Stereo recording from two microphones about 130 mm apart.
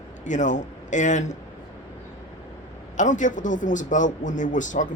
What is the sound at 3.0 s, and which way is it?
A man's voice, 75° left (ahead or behind).